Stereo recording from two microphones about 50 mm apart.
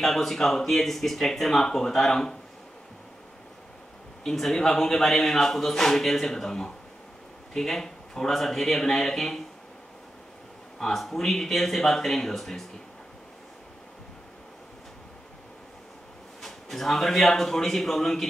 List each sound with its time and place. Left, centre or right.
0.0 s a man's voice: centre
4.2 s a man's voice: centre
10.8 s a man's voice: centre
16.3 s a man's voice: centre